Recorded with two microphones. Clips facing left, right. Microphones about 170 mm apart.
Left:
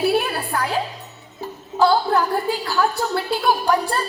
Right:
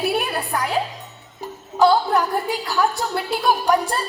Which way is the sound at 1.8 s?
20° right (ahead or behind).